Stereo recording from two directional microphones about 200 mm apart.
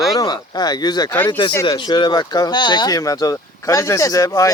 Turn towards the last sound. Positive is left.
turn(degrees=15)  # may be behind; listen again after turning